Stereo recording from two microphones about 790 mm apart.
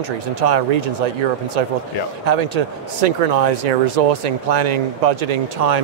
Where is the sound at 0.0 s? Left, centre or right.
Right.